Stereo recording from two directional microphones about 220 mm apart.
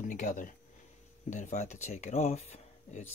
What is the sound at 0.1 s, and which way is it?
Speech, 35° left (ahead or behind).